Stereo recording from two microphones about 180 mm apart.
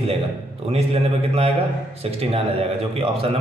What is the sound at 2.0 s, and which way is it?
Speech, 35° right (ahead or behind).